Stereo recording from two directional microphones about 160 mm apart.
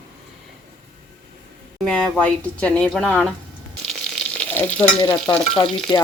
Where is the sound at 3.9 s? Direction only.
5° left (ahead or behind).